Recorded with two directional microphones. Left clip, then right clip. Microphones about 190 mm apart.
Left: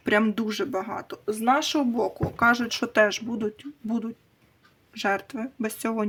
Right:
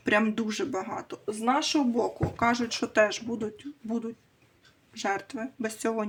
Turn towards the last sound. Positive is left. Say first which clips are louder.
# left 1 dB
turn(degrees=30)  # may be behind; listen again after turning